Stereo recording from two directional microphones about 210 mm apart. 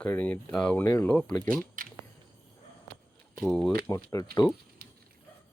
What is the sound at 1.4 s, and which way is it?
Speech, 40° right (ahead or behind).